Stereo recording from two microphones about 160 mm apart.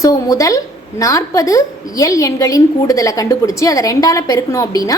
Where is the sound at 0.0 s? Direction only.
20° left (ahead or behind).